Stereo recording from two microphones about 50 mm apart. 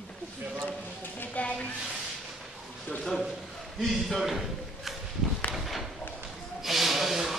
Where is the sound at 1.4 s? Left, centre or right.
Left.